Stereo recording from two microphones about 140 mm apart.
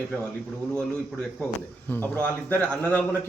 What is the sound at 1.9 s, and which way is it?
Speech, 15° left (ahead or behind).